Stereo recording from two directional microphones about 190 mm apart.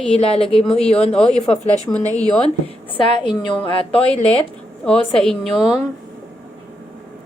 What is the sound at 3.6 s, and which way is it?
Speech, 30° left (ahead or behind).